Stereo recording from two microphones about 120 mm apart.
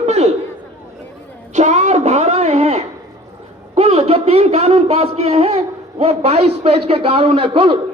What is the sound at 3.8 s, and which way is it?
A man's voice, 60° right (ahead or behind).